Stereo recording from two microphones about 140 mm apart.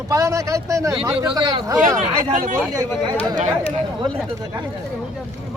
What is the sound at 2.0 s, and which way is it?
Speech, 65° right (ahead or behind).